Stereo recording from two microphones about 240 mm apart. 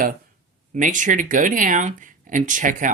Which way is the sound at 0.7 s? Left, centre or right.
Right.